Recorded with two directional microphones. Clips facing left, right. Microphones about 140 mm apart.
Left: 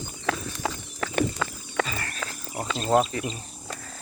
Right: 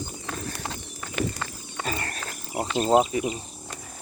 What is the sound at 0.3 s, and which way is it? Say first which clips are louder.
Clip-clop: left 8 dB; 90° left.